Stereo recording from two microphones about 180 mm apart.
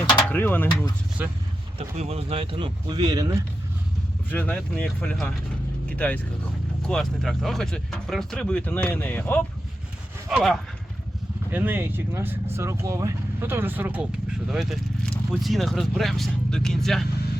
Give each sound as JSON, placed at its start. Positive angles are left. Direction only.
{"t": 0.2, "sound": "speech", "side_deg": 10}
{"t": 1.2, "sound": "speech", "side_deg": -10}
{"t": 2.0, "sound": "speech", "side_deg": -35}
{"t": 4.3, "sound": "speech", "side_deg": 10}
{"t": 6.8, "sound": "speech", "side_deg": 5}
{"t": 11.5, "sound": "speech", "side_deg": -10}